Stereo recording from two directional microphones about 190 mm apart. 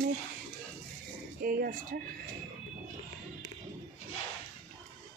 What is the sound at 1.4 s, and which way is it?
Speech, 50° right (ahead or behind).